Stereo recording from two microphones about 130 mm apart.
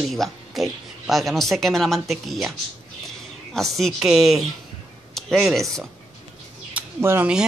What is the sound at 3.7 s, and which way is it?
Speech, centre (ahead or behind).